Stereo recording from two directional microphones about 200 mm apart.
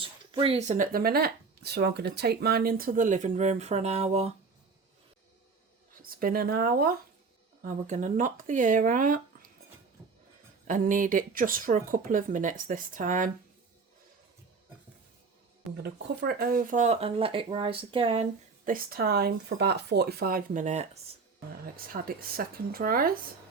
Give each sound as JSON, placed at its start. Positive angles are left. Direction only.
{"t": 0.0, "sound": "speech", "side_deg": -25}
{"t": 6.0, "sound": "speech", "side_deg": -45}
{"t": 10.7, "sound": "speech", "side_deg": -40}
{"t": 15.8, "sound": "speech", "side_deg": -50}
{"t": 18.6, "sound": "speech", "side_deg": -45}
{"t": 21.9, "sound": "speech", "side_deg": -45}